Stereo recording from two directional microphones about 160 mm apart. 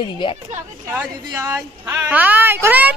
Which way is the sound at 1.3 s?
15° right (ahead or behind).